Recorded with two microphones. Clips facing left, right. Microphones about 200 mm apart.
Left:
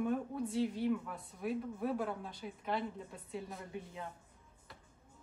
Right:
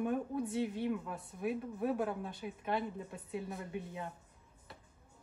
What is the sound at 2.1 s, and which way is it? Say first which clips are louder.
Speech: right 2 dB; centre (ahead or behind).